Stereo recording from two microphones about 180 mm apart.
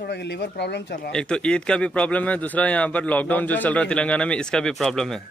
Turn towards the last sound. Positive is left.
turn(degrees=0)  # may be behind; listen again after turning